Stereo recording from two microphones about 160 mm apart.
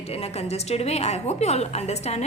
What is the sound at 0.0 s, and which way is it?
A woman's voice, 40° left (ahead or behind).